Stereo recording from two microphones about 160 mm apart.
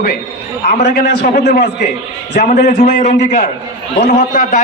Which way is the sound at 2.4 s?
65° left (ahead or behind).